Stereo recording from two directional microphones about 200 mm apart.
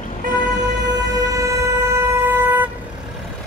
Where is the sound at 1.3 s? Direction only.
15° right (ahead or behind).